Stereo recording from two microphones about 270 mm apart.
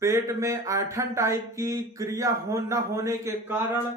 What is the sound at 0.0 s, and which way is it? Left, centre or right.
Speech, centre.